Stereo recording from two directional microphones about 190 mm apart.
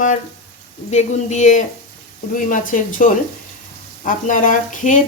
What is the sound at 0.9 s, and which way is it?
Speech, 35° left (ahead or behind).